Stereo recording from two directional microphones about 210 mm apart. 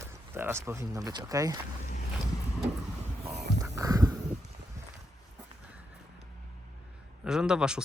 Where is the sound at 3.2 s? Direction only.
15° right (ahead or behind).